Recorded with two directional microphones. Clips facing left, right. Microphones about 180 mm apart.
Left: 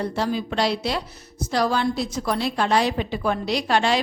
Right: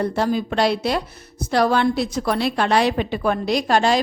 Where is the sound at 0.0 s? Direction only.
50° right (ahead or behind).